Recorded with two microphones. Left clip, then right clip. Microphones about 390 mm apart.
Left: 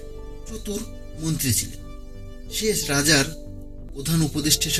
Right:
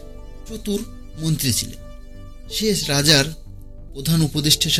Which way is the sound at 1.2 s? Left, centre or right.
Right.